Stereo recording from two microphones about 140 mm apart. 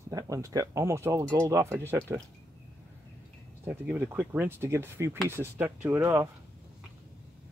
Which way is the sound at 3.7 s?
15° right (ahead or behind).